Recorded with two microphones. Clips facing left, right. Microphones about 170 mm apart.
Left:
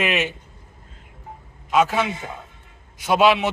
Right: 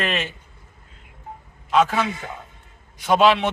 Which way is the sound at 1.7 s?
5° left (ahead or behind).